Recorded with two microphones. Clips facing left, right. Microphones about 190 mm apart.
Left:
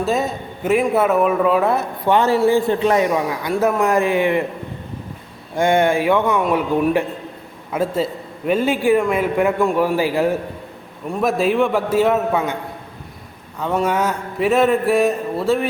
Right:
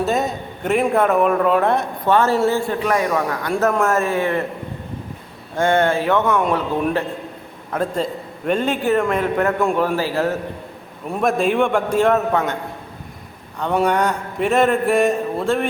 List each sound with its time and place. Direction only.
0.0 s speech: centre (ahead or behind)
2.0 s a man's voice: 15° left (ahead or behind)
5.5 s a man's voice: 15° left (ahead or behind)
11.1 s speech: centre (ahead or behind)
13.6 s speech: 5° left (ahead or behind)